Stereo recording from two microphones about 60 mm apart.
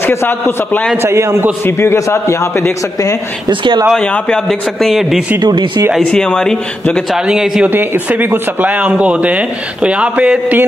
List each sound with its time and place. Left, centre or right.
0.0 s a man's voice: left
0.3 s a man's voice: left
1.0 s a man's voice: right
1.7 s a man's voice: left
2.0 s a man's voice: left
4.0 s a man's voice: centre
4.5 s a man's voice: centre
6.0 s a man's voice: centre
7.1 s a man's voice: centre
7.6 s speech: right